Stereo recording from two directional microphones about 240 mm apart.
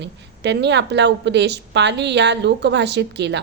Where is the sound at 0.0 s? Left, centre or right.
Right.